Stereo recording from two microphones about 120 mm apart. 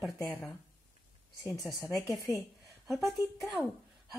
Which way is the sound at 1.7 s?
25° left (ahead or behind).